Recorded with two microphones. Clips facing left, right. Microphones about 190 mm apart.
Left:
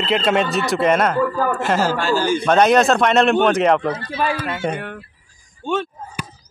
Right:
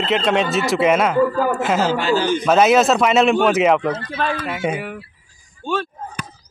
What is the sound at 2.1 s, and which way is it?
Speech, 10° left (ahead or behind).